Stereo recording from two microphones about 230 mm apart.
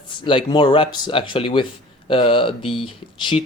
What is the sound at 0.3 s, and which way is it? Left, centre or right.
Speech, left.